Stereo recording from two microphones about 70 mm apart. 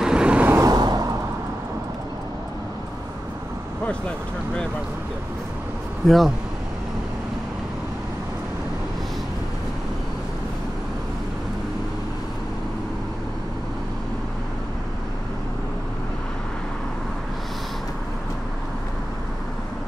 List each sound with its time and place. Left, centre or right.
0.0 s vehicle: centre
0.6 s a sound: right
6.0 s speech: centre